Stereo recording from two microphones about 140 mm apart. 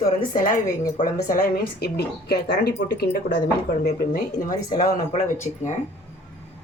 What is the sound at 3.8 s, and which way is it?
Speech, 85° left.